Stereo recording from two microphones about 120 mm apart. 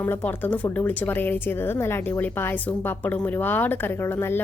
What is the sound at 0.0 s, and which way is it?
Speech, 20° left (ahead or behind).